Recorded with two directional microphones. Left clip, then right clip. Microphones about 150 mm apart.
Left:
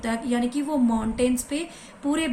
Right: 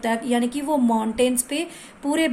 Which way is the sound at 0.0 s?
40° right (ahead or behind).